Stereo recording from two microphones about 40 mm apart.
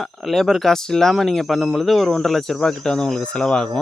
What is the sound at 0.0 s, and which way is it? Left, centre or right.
Speech, centre.